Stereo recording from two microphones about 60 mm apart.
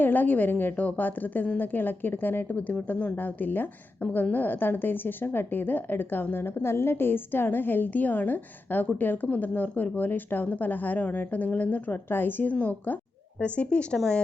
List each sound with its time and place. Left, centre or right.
0.0 s a woman's voice: left